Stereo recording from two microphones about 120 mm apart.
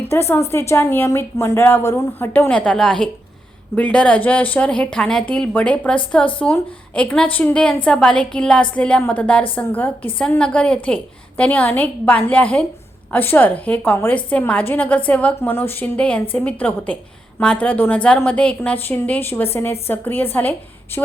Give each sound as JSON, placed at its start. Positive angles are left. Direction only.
{"t": 0.1, "sound": "a woman's voice", "side_deg": 20}